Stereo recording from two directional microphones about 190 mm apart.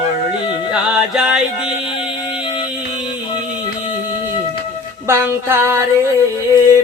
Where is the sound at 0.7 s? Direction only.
5° right (ahead or behind).